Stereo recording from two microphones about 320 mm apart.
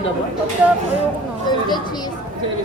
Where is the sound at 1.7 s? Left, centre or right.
Centre.